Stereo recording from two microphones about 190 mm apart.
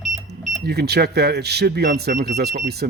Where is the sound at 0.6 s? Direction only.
60° right (ahead or behind).